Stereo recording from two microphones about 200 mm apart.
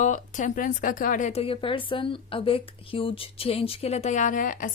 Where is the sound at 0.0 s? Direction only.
40° left (ahead or behind).